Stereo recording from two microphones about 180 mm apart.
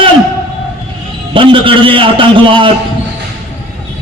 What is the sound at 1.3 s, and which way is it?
A man's voice, 30° right (ahead or behind).